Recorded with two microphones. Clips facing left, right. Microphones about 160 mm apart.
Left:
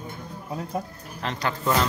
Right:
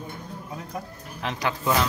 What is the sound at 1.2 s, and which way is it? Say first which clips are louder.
Speech: even; 10° right (ahead or behind).